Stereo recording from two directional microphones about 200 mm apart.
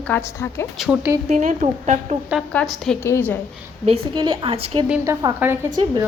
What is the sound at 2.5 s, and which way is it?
Speech, 5° left (ahead or behind).